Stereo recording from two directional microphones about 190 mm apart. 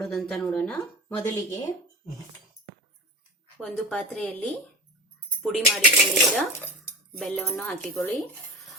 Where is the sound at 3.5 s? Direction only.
Centre (ahead or behind).